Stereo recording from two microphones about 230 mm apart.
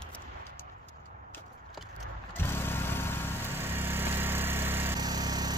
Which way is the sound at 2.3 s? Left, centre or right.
Centre.